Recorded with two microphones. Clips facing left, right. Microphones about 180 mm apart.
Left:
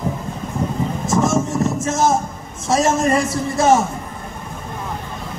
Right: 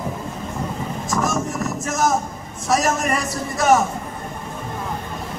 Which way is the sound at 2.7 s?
25° left (ahead or behind).